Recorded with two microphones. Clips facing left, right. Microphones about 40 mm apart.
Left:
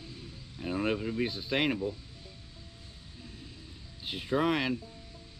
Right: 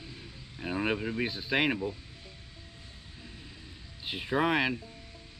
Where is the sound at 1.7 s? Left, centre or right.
Centre.